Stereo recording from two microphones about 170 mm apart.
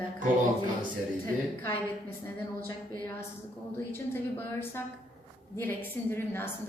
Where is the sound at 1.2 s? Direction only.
15° left (ahead or behind).